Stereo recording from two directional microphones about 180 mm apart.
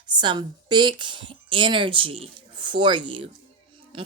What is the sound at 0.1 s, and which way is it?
A woman's voice, 25° right (ahead or behind).